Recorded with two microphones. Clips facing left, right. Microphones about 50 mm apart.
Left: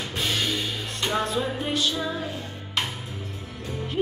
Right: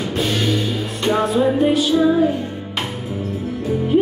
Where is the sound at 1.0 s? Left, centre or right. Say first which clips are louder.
Right 9 dB; centre.